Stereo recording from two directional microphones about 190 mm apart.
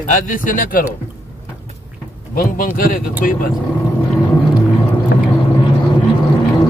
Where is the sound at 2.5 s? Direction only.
50° left (ahead or behind).